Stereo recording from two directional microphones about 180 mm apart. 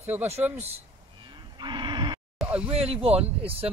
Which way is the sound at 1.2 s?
25° right (ahead or behind).